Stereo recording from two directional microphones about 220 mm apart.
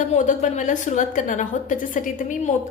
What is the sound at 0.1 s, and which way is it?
A woman's voice, 35° left (ahead or behind).